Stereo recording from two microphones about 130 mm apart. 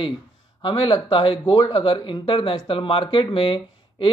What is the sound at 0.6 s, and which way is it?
Speech, 40° left (ahead or behind).